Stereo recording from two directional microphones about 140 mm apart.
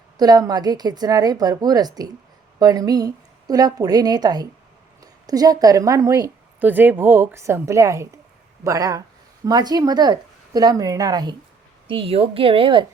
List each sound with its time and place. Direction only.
0.2 s a woman's voice: 30° right (ahead or behind)
6.6 s a woman's voice: 15° right (ahead or behind); by 11.3 s 30° right (ahead or behind)
11.9 s a woman's voice: 40° right (ahead or behind)